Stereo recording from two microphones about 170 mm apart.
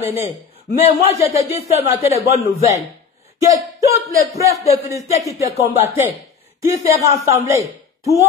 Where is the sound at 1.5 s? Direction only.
40° left (ahead or behind).